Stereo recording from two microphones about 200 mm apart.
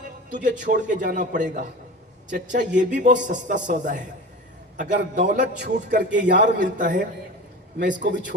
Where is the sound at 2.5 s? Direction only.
60° right (ahead or behind).